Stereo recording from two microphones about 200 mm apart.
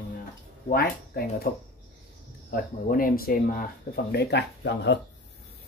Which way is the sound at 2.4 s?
45° left (ahead or behind).